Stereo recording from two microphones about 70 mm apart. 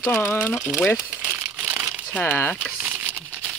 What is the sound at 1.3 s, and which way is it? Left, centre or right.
Crumpling, right.